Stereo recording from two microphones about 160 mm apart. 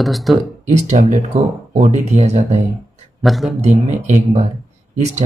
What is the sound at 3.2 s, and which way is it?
Speech, centre (ahead or behind).